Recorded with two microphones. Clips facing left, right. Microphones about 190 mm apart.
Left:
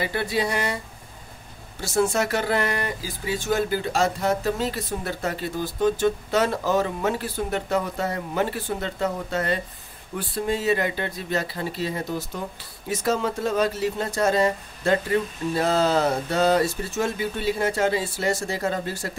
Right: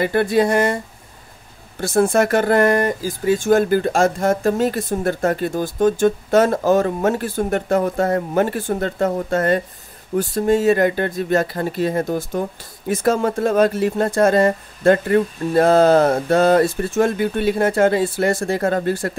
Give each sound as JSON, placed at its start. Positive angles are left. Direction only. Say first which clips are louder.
{"t": 0.0, "sound": "speech", "louder": "right 9 dB", "side_deg": -50}
{"t": 1.8, "sound": "speech", "louder": "right 6 dB", "side_deg": -55}